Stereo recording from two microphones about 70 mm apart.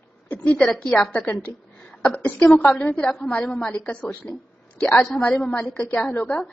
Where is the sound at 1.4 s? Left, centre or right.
Left.